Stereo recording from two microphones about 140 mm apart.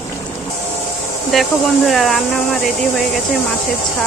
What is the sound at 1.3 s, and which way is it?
Speech, centre (ahead or behind).